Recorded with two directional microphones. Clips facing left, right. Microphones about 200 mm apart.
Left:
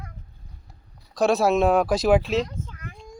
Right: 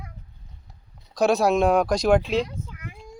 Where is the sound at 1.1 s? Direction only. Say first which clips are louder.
Even; centre (ahead or behind).